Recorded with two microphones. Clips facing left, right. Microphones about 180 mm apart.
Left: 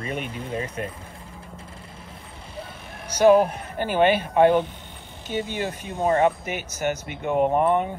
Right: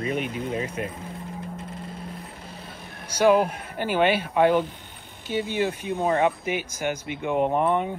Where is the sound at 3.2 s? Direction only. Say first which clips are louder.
Left 3 dB; 10° right (ahead or behind).